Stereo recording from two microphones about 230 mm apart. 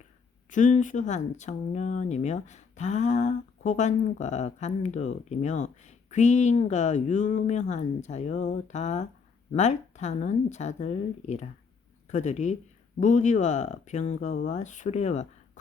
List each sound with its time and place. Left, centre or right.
0.5 s speech: left